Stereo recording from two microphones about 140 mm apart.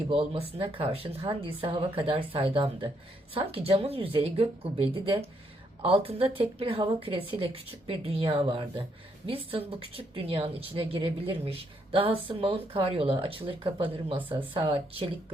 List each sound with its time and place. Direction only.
0.1 s a woman's voice: 45° right (ahead or behind)